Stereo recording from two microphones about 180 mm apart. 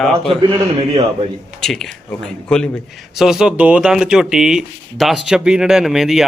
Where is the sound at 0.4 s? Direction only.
30° right (ahead or behind).